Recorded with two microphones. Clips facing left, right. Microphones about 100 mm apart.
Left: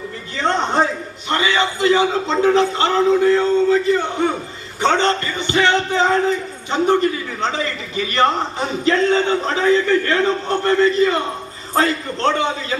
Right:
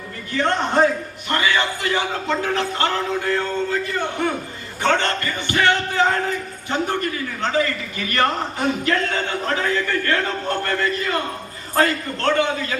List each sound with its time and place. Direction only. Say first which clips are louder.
0.3 s a man's voice: left 1 dB; 20° left (ahead or behind)